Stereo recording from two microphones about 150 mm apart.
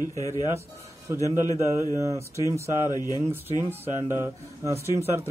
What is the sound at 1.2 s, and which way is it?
Speech, 20° right (ahead or behind).